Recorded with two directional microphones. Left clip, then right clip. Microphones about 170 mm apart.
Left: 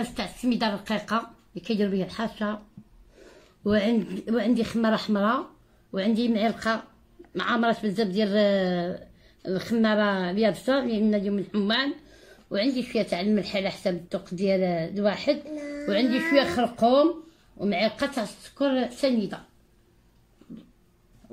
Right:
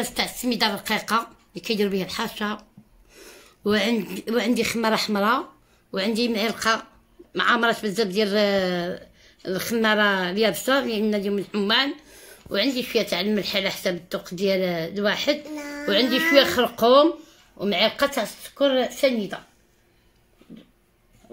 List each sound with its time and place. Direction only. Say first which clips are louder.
0.1 s a woman's voice: right 4 dB; 55° right (ahead or behind)
3.6 s speech: right 2 dB; 55° right (ahead or behind)